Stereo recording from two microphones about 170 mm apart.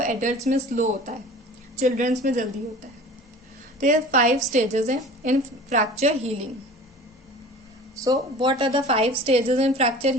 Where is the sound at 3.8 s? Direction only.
45° right (ahead or behind).